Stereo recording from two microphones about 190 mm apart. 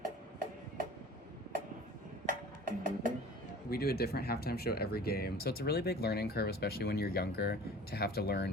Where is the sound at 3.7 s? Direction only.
55° left (ahead or behind).